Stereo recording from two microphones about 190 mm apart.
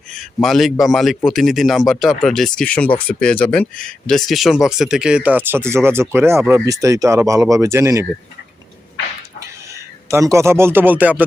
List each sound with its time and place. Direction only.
0.4 s a man's voice: centre (ahead or behind)
9.7 s a man's voice: 15° right (ahead or behind)